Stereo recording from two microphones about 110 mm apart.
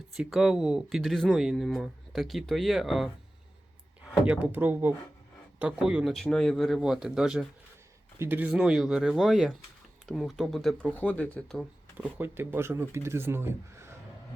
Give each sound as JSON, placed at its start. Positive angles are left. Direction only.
{"t": 0.2, "sound": "speech", "side_deg": -5}
{"t": 4.3, "sound": "speech", "side_deg": -15}
{"t": 8.2, "sound": "speech", "side_deg": -15}
{"t": 10.9, "sound": "speech", "side_deg": 15}
{"t": 11.9, "sound": "speech", "side_deg": -20}